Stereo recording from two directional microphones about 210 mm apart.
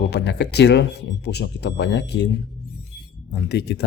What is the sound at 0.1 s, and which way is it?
Speech, 55° left (ahead or behind).